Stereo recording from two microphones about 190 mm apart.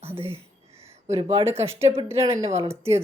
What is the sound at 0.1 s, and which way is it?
Speech, 10° right (ahead or behind).